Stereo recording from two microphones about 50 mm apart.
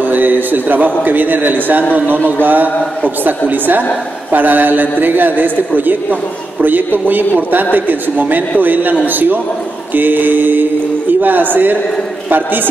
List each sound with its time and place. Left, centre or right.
0.1 s a man's voice: right